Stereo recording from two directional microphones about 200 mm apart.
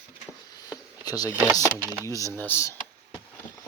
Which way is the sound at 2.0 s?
15° left (ahead or behind).